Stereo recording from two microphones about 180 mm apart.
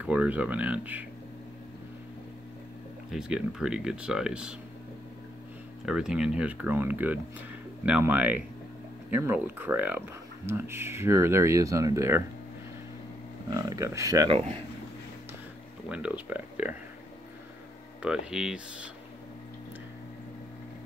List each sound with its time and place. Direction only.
0.0 s speech: 10° right (ahead or behind)
3.1 s speech: 5° right (ahead or behind)
5.9 s speech: 5° right (ahead or behind)
13.5 s speech: 20° right (ahead or behind)
15.9 s speech: 5° right (ahead or behind)
18.0 s speech: 5° right (ahead or behind)